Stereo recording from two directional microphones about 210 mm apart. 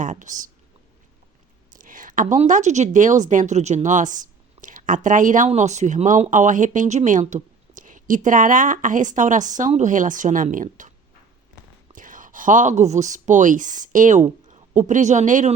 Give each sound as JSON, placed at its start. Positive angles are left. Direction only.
{"t": 0.0, "sound": "speech", "side_deg": -35}
{"t": 1.7, "sound": "speech", "side_deg": -40}
{"t": 11.9, "sound": "speech", "side_deg": -40}